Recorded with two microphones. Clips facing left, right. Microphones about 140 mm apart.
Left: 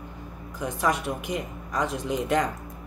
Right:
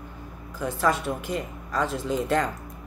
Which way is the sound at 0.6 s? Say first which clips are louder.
Right 1 dB; 15° left (ahead or behind).